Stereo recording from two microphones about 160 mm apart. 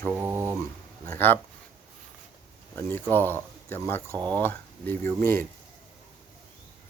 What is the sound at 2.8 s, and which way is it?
A man's voice, 15° left (ahead or behind).